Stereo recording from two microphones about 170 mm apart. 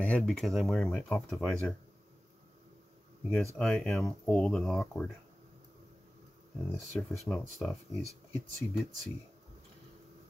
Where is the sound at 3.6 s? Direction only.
Centre (ahead or behind).